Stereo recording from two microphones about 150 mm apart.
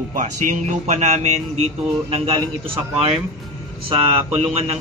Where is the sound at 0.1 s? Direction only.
55° right (ahead or behind).